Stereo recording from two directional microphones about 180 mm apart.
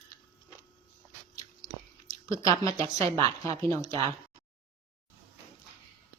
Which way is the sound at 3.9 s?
35° right (ahead or behind).